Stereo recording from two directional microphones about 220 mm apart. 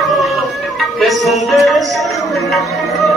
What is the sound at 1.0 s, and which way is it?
Music, centre (ahead or behind).